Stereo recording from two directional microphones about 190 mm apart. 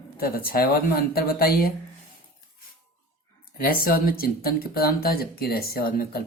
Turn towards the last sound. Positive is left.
turn(degrees=50)  # may be behind; listen again after turning